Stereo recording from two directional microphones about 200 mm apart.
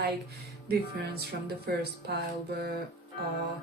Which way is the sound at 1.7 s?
55° right (ahead or behind).